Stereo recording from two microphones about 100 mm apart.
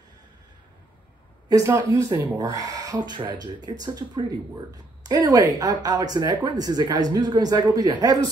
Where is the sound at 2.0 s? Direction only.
25° right (ahead or behind).